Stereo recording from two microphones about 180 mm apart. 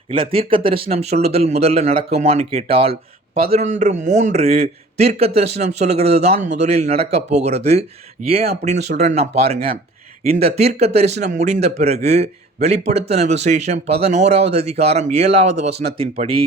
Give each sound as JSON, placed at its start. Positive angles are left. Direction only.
{"t": 0.1, "sound": "speech", "side_deg": -30}